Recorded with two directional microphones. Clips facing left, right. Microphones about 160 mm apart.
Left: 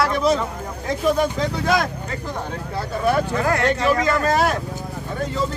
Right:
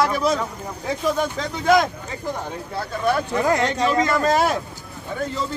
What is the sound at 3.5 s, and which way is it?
Speech, 15° right (ahead or behind).